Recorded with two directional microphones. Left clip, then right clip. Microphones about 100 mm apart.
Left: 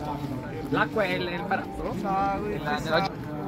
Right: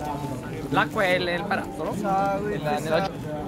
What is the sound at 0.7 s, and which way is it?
Speech, 25° right (ahead or behind).